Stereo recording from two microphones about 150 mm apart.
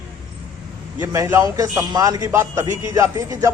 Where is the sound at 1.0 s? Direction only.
20° right (ahead or behind).